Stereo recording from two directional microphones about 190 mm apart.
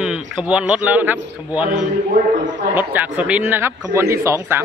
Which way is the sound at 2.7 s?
10° right (ahead or behind).